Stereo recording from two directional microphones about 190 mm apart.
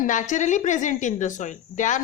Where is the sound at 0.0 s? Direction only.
40° left (ahead or behind).